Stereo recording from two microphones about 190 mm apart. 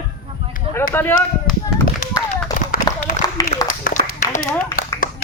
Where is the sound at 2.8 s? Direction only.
50° right (ahead or behind).